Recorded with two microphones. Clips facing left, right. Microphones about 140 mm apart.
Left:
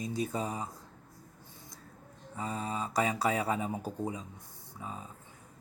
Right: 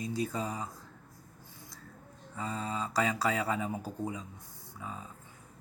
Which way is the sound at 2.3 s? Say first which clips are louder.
Even; 20° left (ahead or behind).